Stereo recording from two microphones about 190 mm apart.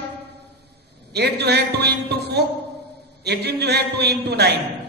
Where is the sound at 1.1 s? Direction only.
60° right (ahead or behind).